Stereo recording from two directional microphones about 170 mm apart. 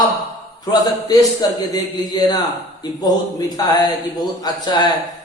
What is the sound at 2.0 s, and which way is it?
A man's voice, 25° left (ahead or behind).